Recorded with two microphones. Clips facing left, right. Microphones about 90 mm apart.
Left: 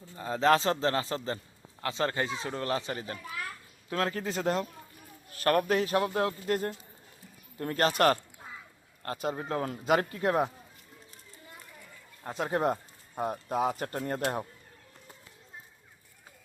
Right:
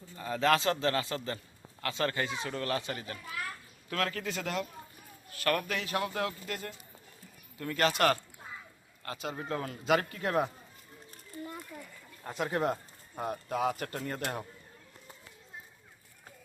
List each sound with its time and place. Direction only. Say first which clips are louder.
0.2 s a man's voice: left 3 dB; 25° left (ahead or behind)
9.3 s a man's voice: left 3 dB; 30° left (ahead or behind)
12.2 s a man's voice: left 2 dB; 30° left (ahead or behind)